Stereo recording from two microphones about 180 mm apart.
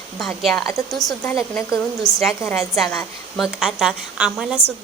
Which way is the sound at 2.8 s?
Centre (ahead or behind).